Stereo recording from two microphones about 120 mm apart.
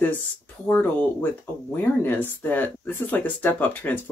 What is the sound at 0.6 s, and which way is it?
Speech, 15° left (ahead or behind).